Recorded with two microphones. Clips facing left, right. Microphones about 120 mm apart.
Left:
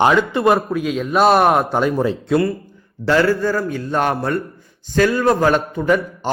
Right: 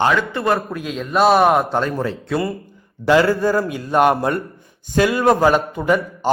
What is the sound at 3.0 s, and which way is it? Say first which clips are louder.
Speech: right 1 dB; 10° right (ahead or behind).